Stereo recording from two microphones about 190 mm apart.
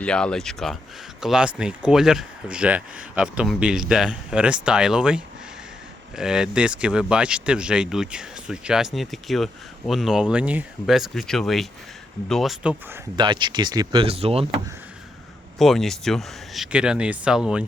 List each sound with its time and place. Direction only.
0.0 s speech: 5° left (ahead or behind)
13.1 s speech: 25° right (ahead or behind)
15.5 s speech: centre (ahead or behind)